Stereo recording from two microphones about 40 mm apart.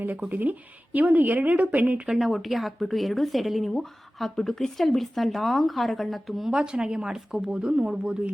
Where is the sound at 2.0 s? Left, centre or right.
Centre.